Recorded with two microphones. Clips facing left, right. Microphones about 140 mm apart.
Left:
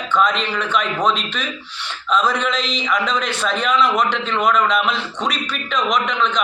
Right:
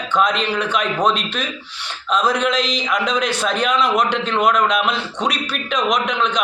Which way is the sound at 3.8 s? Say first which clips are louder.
Left 1 dB; 35° right (ahead or behind).